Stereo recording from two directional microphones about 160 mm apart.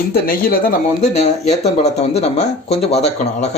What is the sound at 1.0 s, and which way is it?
Speech, 45° left (ahead or behind).